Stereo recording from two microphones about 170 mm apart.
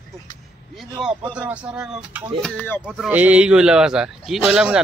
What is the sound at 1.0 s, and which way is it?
A man's voice, 5° right (ahead or behind).